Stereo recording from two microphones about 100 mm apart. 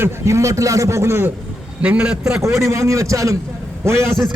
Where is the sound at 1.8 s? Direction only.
10° right (ahead or behind).